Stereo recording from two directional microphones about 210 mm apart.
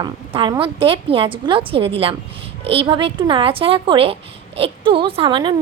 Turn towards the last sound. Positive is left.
turn(degrees=-20)  # may be behind; listen again after turning